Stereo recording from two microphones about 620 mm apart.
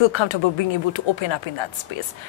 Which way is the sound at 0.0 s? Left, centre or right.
Left.